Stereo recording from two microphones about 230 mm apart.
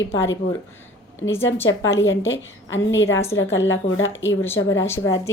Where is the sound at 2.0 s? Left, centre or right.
Left.